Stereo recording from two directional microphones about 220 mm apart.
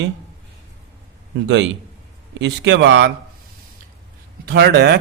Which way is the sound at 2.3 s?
55° right (ahead or behind).